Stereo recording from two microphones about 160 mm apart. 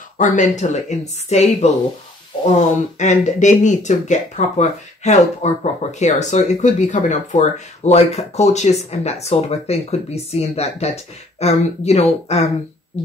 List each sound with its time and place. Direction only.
0.2 s speech: 50° left (ahead or behind)
3.0 s speech: 50° left (ahead or behind)